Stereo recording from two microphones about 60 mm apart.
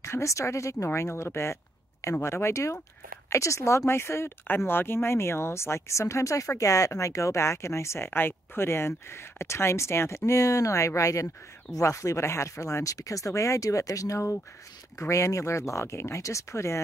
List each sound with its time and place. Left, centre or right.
0.0 s speech: left
0.8 s speech: left